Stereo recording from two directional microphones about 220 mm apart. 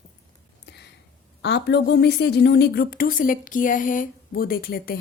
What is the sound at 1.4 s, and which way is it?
A woman's voice, 50° left (ahead or behind).